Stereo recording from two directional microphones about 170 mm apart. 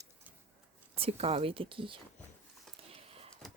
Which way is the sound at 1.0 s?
35° right (ahead or behind).